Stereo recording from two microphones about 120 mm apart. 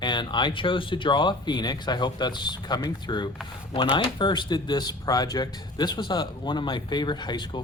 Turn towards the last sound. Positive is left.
turn(degrees=40)  # may be behind; listen again after turning